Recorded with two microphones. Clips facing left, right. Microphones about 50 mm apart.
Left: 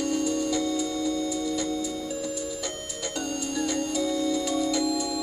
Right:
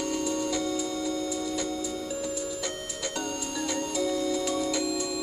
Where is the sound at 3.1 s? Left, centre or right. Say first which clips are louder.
Left 4 dB; centre.